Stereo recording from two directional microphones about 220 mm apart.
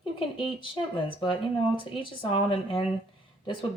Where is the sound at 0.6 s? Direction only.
20° left (ahead or behind).